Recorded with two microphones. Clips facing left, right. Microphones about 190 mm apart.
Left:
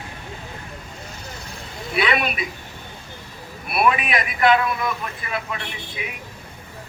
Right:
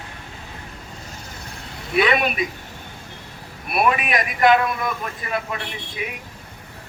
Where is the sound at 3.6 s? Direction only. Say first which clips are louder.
Even; 45° right (ahead or behind).